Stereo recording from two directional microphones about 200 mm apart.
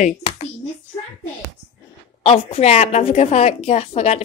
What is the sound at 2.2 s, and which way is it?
A woman's voice, 30° left (ahead or behind).